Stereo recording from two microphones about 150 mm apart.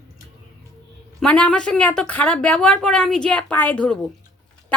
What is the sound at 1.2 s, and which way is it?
A woman's voice, 5° left (ahead or behind).